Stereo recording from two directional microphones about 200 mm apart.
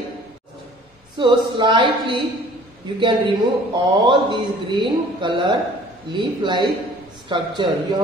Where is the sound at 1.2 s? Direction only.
25° right (ahead or behind).